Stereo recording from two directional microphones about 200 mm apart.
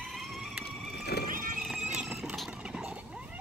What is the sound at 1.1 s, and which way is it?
Horse, 50° left (ahead or behind).